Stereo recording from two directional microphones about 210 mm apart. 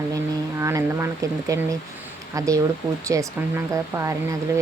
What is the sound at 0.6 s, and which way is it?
Speech, 15° right (ahead or behind).